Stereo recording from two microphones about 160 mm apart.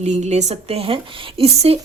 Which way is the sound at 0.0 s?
45° right (ahead or behind).